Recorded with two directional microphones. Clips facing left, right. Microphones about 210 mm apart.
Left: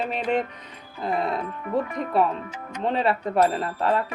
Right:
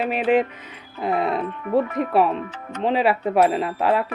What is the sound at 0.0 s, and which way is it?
Speech, 5° right (ahead or behind).